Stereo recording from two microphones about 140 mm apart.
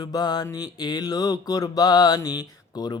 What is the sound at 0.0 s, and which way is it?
Speech, 30° left (ahead or behind).